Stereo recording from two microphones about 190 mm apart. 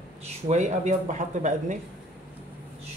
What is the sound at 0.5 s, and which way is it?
Speech, 40° right (ahead or behind).